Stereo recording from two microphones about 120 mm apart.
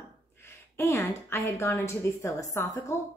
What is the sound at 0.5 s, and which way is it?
Speech, 20° left (ahead or behind).